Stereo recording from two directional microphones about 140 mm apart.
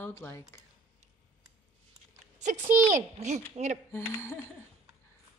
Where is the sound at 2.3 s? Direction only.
60° right (ahead or behind).